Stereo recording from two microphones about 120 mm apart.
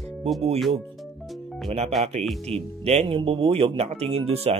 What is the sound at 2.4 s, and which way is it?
Speech, 60° right (ahead or behind).